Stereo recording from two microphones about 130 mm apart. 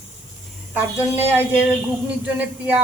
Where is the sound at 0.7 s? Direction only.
15° right (ahead or behind).